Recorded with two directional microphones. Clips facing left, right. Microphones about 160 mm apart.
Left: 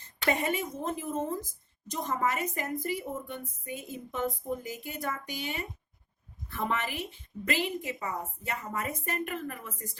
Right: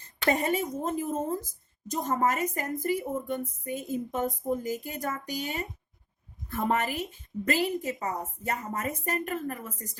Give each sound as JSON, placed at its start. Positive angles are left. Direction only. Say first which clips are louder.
{"t": 0.3, "sound": "a woman's voice", "louder": "right 3 dB", "side_deg": -40}